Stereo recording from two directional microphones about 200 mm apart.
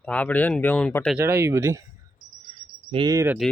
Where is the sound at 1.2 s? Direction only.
10° right (ahead or behind).